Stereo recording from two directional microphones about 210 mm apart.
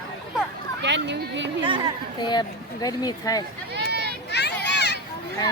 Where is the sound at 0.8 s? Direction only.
55° right (ahead or behind).